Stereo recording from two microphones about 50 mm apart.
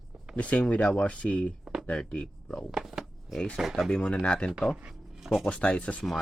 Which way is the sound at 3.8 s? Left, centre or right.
Centre.